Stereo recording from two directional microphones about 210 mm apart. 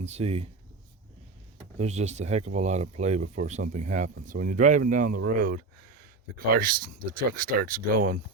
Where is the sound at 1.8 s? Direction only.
30° right (ahead or behind).